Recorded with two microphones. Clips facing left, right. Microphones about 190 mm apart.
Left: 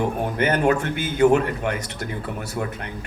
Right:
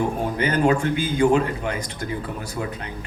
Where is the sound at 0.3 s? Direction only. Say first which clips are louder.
Even; 60° left (ahead or behind).